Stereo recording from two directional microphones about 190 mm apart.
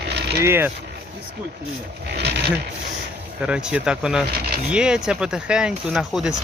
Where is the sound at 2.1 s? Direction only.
60° right (ahead or behind).